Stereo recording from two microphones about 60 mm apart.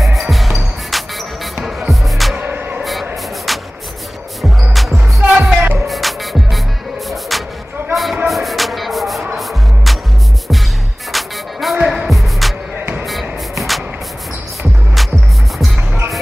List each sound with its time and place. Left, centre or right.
0.0 s music: centre
2.3 s music: right
2.8 s spray: centre
4.4 s music: centre
4.9 s music: centre
5.8 s music: centre
7.9 s a sound: centre
8.3 s music: centre
11.1 s music: centre